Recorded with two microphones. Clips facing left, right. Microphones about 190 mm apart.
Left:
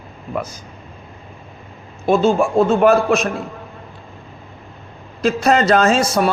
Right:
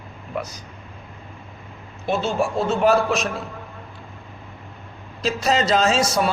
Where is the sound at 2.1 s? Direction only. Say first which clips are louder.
Left 7 dB; 50° left (ahead or behind).